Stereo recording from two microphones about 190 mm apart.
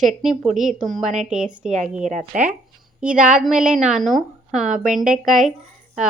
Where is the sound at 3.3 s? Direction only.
5° right (ahead or behind).